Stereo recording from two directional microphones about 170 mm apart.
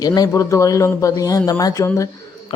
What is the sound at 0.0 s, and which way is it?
Speech, 20° left (ahead or behind).